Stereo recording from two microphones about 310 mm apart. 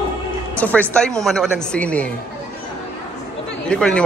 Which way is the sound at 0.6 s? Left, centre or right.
Centre.